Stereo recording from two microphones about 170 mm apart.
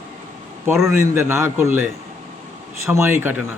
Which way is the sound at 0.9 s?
15° right (ahead or behind).